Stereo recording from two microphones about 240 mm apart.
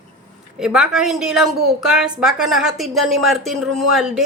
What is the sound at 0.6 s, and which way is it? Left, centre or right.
Speech, centre.